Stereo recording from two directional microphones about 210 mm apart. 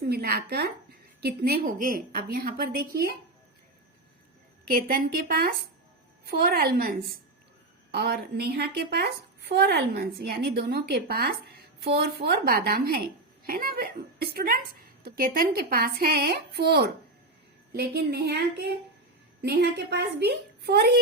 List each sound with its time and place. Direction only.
0.1 s speech: 45° right (ahead or behind)
4.7 s speech: 45° right (ahead or behind)